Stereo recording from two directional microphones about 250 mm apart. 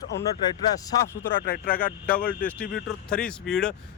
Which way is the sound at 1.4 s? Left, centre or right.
Left.